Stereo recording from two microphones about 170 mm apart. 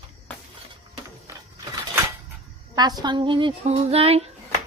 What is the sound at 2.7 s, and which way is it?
Speech, 25° right (ahead or behind).